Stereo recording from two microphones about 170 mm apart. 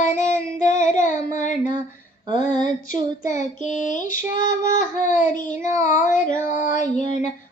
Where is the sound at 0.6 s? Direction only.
50° left (ahead or behind).